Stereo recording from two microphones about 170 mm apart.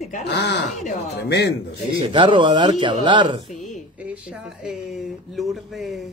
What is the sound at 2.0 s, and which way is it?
Speech, 30° right (ahead or behind).